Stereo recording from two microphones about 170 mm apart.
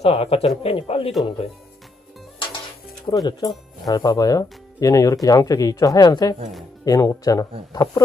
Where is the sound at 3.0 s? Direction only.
25° left (ahead or behind).